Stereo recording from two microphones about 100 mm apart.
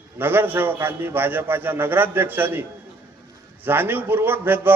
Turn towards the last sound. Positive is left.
turn(degrees=-20)  # may be behind; listen again after turning